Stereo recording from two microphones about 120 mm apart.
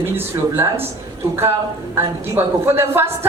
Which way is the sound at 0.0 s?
15° right (ahead or behind).